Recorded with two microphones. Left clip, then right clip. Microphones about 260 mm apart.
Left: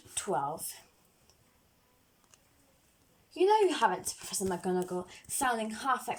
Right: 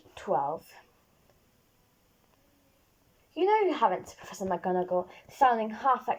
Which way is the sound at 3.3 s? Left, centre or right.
Left.